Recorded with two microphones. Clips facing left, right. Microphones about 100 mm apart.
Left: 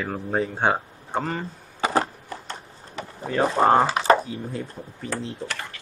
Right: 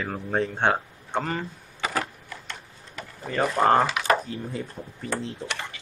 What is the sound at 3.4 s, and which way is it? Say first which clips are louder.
Speech: left 3 dB; 25° left (ahead or behind).